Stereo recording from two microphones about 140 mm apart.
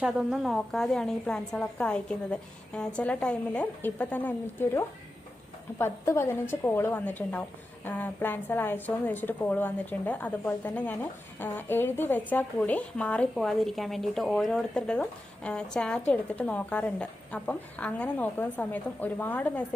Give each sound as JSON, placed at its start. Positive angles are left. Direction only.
{"t": 0.0, "sound": "a woman's voice", "side_deg": -5}